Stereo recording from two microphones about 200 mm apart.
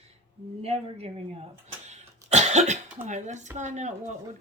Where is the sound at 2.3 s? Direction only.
35° right (ahead or behind).